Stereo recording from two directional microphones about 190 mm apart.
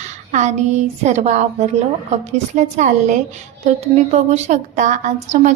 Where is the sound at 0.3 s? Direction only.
40° right (ahead or behind).